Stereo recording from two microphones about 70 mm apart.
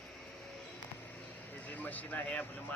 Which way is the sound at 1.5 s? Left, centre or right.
Left.